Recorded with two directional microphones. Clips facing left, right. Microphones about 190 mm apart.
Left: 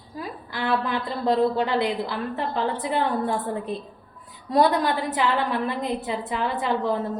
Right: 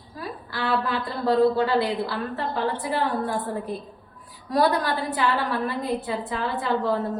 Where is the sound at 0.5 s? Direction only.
20° left (ahead or behind).